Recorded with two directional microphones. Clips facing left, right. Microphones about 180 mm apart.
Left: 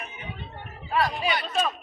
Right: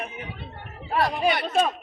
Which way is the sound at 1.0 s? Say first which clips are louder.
Right 7 dB; 55° right (ahead or behind).